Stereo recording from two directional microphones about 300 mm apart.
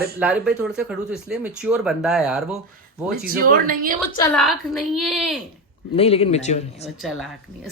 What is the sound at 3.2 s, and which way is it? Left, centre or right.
Speech, right.